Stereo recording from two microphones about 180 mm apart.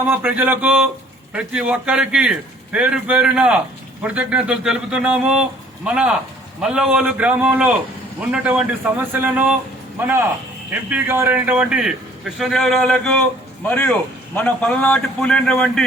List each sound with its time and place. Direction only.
0.0 s a man's voice: 10° right (ahead or behind)